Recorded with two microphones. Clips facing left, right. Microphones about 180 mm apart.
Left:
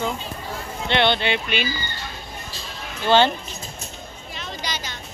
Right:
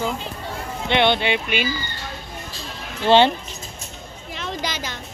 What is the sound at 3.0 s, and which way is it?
Speech, 25° right (ahead or behind).